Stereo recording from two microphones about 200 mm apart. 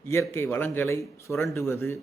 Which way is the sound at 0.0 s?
10° left (ahead or behind).